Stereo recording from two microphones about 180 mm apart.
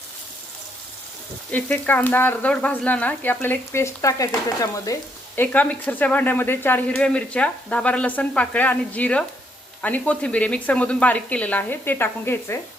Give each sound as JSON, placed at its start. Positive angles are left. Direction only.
{"t": 1.5, "sound": "speech", "side_deg": 10}